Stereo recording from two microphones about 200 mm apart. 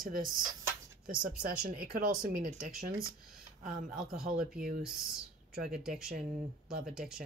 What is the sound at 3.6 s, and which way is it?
Speech, 45° right (ahead or behind).